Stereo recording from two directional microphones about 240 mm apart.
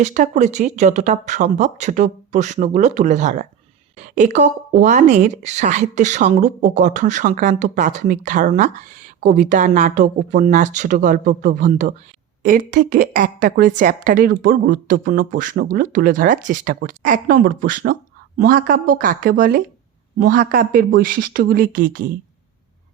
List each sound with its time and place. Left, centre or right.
0.0 s a woman's voice: right